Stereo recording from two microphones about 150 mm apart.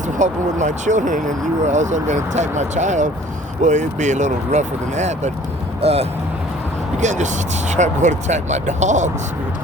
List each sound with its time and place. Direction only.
0.2 s speech: 55° right (ahead or behind)